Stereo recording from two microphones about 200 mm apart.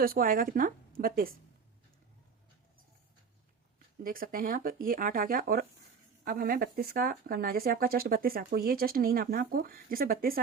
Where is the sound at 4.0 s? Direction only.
45° right (ahead or behind).